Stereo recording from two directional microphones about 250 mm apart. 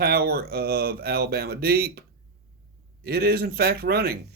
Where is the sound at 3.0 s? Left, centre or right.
Right.